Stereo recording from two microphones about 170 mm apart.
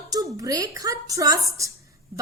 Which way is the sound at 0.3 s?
20° right (ahead or behind).